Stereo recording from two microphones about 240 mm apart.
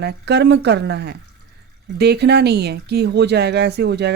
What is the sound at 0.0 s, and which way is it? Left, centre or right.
Speech, right.